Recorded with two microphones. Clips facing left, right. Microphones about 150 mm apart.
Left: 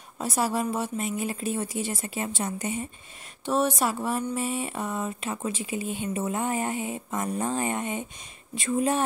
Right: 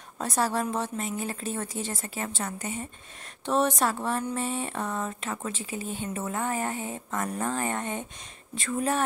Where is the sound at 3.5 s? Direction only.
5° left (ahead or behind); by 9.0 s 20° left (ahead or behind).